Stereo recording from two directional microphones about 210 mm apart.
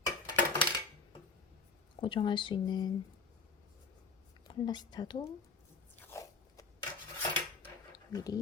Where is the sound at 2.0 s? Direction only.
25° left (ahead or behind).